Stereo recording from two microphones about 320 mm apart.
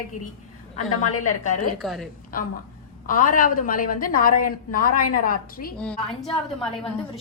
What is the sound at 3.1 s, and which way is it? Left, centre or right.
A woman's voice, left.